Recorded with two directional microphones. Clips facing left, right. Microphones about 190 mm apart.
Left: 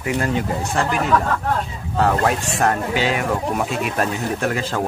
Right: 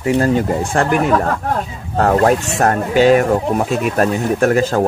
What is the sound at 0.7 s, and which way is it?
Speech, 55° right (ahead or behind).